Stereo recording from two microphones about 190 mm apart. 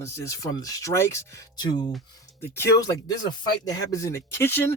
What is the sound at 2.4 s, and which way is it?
Speech, 10° left (ahead or behind).